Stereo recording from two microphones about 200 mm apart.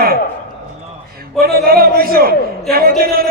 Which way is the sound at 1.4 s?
50° right (ahead or behind).